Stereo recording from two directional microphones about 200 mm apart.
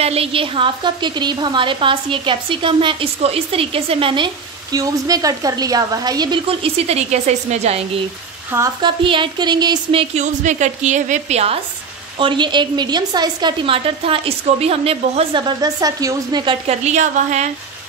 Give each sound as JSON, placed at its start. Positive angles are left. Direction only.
{"t": 0.0, "sound": "a woman's voice", "side_deg": -30}
{"t": 8.5, "sound": "speech", "side_deg": -10}
{"t": 8.8, "sound": "a woman's voice", "side_deg": -25}
{"t": 16.6, "sound": "a woman's voice", "side_deg": -35}